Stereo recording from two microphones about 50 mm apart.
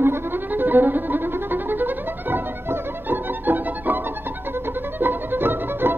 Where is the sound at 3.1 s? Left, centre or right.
Right.